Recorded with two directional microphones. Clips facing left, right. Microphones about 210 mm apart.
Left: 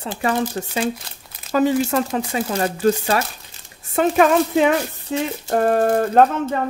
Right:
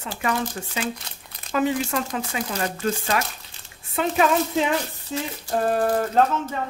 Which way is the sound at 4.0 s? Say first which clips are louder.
Left 5 dB; 55° left (ahead or behind).